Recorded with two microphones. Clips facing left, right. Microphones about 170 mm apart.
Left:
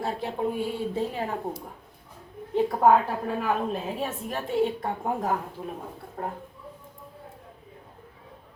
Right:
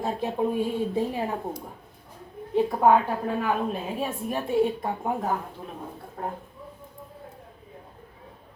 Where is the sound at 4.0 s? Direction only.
10° right (ahead or behind).